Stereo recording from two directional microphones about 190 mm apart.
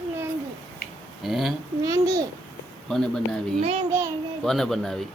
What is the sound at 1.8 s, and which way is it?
Babbling, 20° right (ahead or behind).